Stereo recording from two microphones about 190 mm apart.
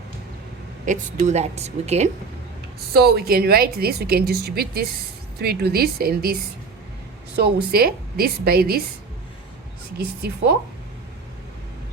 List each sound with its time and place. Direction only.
0.9 s a woman's voice: 40° right (ahead or behind)
2.9 s a woman's voice: 55° right (ahead or behind)
7.3 s a woman's voice: 55° right (ahead or behind)